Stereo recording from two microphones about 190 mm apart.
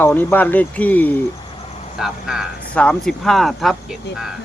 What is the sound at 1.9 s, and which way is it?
Speech, centre (ahead or behind).